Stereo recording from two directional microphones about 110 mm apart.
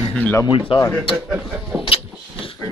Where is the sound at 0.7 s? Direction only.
50° left (ahead or behind).